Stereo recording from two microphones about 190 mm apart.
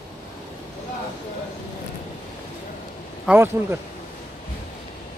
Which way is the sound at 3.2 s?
10° right (ahead or behind).